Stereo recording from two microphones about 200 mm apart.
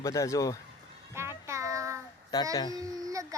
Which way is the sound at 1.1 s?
10° right (ahead or behind).